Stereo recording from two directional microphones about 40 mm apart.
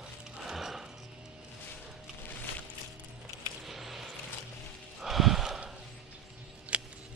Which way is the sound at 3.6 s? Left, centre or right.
Centre.